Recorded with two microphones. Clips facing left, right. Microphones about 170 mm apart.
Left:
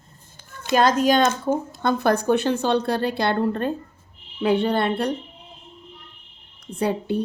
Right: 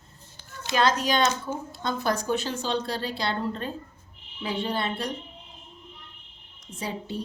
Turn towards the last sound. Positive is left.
turn(degrees=60)  # may be behind; listen again after turning